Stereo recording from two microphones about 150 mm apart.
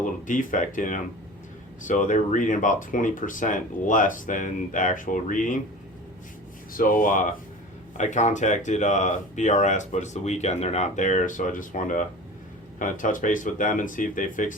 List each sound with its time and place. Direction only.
0.0 s speech: 60° left (ahead or behind)
6.7 s speech: 65° left (ahead or behind)